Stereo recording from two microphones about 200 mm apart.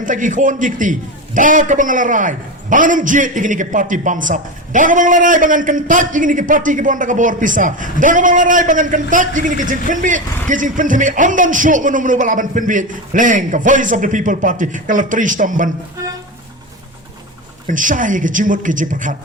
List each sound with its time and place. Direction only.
0.0 s a man's voice: 40° right (ahead or behind)
17.7 s a man's voice: 40° right (ahead or behind)